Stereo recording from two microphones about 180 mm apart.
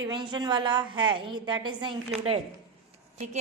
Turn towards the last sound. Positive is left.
turn(degrees=-40)  # may be behind; listen again after turning